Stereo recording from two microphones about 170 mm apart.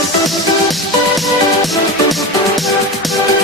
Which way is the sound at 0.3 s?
Centre (ahead or behind).